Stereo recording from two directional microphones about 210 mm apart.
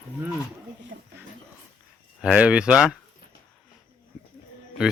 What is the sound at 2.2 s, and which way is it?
Speech, 5° right (ahead or behind).